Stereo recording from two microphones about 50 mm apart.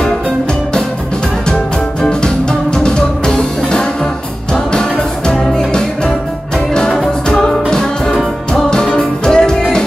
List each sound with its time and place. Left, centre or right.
1.5 s music: centre
7.2 s music: centre